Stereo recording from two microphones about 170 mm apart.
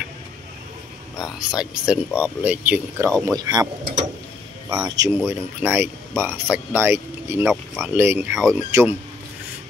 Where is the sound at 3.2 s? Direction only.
20° right (ahead or behind).